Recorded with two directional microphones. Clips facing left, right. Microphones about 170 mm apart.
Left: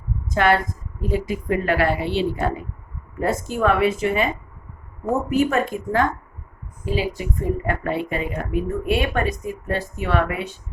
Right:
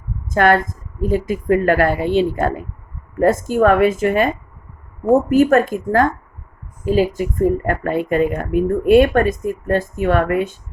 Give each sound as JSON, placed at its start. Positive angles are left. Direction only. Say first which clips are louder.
{"t": 0.3, "sound": "speech", "louder": "right 4 dB", "side_deg": -50}
{"t": 5.3, "sound": "speech", "louder": "right 7 dB", "side_deg": -50}